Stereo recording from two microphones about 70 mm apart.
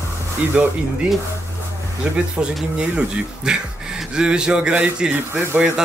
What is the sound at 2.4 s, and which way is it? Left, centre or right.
Speech, centre.